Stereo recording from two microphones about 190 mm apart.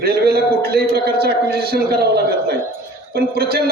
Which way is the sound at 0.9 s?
55° right (ahead or behind).